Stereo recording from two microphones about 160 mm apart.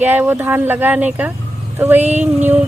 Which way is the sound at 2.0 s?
45° right (ahead or behind).